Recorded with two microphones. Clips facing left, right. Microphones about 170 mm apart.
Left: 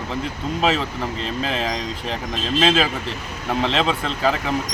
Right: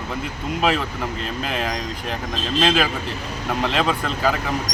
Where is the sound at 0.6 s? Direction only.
5° right (ahead or behind).